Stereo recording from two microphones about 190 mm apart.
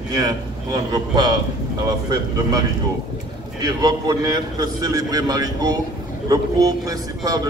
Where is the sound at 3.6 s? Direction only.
20° right (ahead or behind).